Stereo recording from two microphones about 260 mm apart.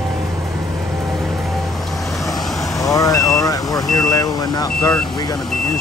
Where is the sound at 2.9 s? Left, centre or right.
Centre.